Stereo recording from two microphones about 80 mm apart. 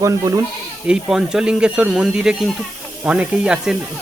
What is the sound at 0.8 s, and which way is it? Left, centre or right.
Speech, centre.